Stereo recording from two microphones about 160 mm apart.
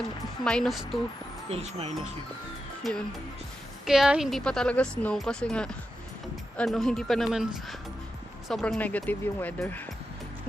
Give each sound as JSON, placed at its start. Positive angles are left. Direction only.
{"t": 0.4, "sound": "speech", "side_deg": 5}
{"t": 1.5, "sound": "speech", "side_deg": -40}
{"t": 2.8, "sound": "speech", "side_deg": 0}